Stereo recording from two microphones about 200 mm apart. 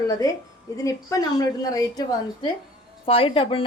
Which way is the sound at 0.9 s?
15° left (ahead or behind).